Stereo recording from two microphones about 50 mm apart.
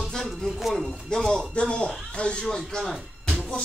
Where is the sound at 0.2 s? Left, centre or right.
Centre.